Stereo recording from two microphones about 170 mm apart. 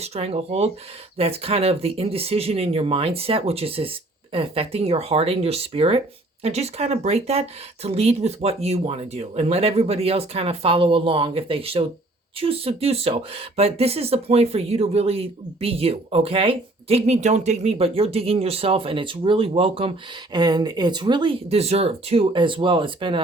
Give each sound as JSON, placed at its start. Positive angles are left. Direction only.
{"t": 0.0, "sound": "speech", "side_deg": -40}